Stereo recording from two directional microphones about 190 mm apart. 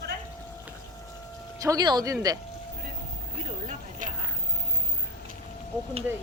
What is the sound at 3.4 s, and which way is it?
Vehicle, 40° right (ahead or behind).